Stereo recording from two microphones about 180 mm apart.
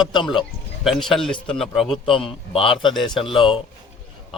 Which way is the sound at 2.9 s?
Centre (ahead or behind).